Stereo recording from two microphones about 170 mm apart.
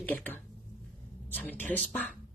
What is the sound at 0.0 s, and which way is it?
A woman's voice, 10° left (ahead or behind).